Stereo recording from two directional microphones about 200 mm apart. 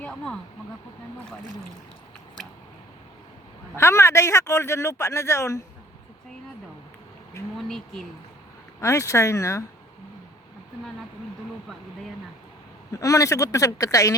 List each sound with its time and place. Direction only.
0.0 s speech: 5° left (ahead or behind)
3.8 s a man's voice: 15° left (ahead or behind)
8.8 s a man's voice: 15° left (ahead or behind)
12.9 s a man's voice: 15° left (ahead or behind)